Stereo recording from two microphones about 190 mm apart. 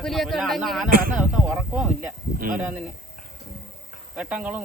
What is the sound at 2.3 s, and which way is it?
Speech, 50° right (ahead or behind).